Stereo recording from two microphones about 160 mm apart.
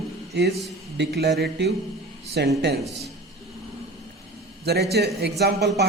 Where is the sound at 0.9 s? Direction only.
90° right.